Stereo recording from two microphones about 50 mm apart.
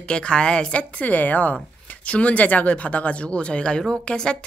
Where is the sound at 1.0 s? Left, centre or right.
Left.